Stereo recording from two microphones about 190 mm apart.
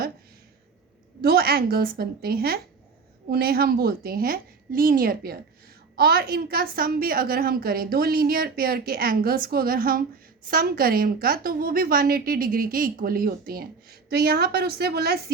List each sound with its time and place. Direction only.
1.2 s a woman's voice: 55° right (ahead or behind)